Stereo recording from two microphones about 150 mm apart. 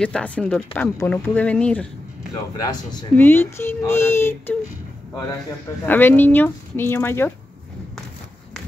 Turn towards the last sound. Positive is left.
turn(degrees=15)  # may be behind; listen again after turning